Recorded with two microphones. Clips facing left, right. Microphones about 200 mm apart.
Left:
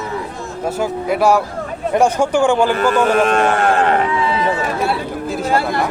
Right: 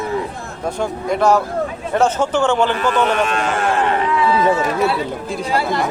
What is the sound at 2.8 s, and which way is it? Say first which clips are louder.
Speech: left 3 dB; 50° left (ahead or behind).